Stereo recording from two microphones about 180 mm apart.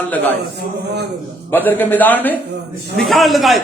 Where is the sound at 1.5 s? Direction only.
10° left (ahead or behind).